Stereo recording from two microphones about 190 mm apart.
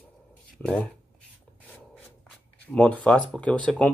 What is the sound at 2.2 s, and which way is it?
Speech, 5° left (ahead or behind).